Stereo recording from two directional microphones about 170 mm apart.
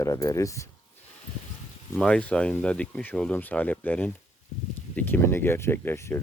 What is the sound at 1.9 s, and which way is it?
Speech, 5° left (ahead or behind).